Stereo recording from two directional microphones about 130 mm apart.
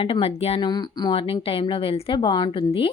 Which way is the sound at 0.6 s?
35° left (ahead or behind).